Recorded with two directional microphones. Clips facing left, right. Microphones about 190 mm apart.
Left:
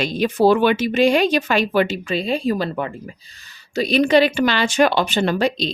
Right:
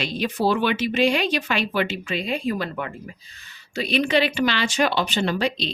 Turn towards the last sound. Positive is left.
turn(degrees=45)  # may be behind; listen again after turning